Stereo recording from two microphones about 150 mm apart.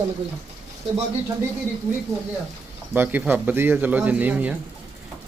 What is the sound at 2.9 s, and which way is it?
Speech, 10° right (ahead or behind).